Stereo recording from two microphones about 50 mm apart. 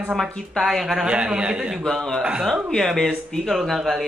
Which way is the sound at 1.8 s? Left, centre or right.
Centre.